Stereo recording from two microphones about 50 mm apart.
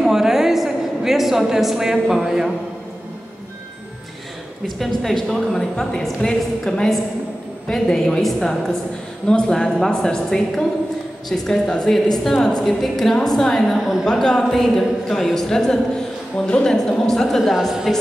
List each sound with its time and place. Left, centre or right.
0.0 s a woman's voice: centre
4.7 s a woman's voice: centre
13.7 s a woman's voice: centre
14.0 s a woman's voice: centre